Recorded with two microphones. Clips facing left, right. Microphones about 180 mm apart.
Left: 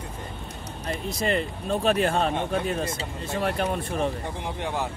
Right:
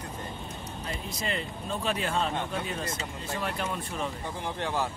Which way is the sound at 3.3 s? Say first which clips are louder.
Left 7 dB; 60° left (ahead or behind).